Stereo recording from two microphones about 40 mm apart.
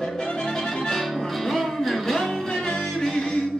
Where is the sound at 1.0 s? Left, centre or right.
Centre.